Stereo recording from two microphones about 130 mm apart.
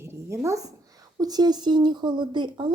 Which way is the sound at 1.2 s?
30° right (ahead or behind).